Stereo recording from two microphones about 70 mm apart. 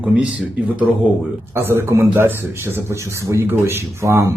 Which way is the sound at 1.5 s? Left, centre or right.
Right.